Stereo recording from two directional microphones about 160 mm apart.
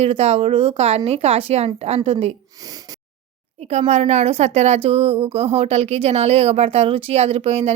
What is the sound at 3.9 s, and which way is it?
Speech, 45° right (ahead or behind).